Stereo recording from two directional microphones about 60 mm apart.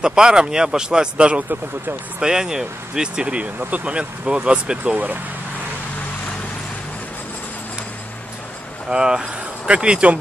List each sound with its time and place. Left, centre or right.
0.0 s speech: centre
4.9 s speech: right
8.9 s speech: centre